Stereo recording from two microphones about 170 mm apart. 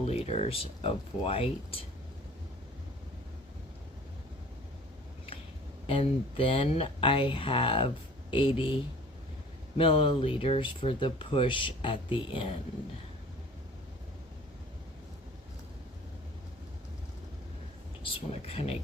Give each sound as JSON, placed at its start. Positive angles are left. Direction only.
{"t": 0.0, "sound": "speech", "side_deg": 40}
{"t": 5.8, "sound": "speech", "side_deg": 30}
{"t": 18.0, "sound": "speech", "side_deg": 35}